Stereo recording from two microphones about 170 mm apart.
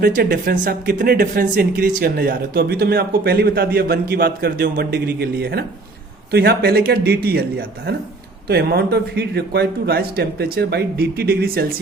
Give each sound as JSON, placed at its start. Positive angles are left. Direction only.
{"t": 0.0, "sound": "a man's voice", "side_deg": -60}